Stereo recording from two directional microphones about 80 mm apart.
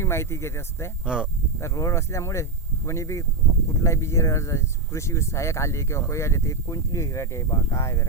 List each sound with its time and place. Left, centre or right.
0.0 s speech: left
1.0 s speech: centre
1.5 s speech: left